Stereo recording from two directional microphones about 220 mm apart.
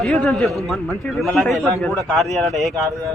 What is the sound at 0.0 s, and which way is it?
A man's voice, centre (ahead or behind).